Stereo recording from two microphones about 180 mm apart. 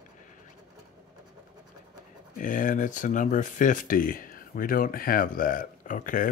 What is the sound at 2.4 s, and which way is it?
Speech, 45° left (ahead or behind).